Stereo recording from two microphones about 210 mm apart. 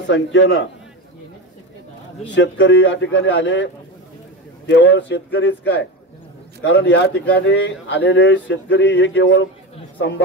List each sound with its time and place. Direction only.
0.0 s speech: 60° left (ahead or behind)
2.2 s a man's voice: 60° left (ahead or behind)